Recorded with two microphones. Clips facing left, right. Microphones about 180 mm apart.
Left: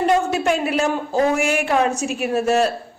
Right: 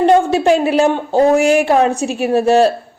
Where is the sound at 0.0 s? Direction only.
30° right (ahead or behind).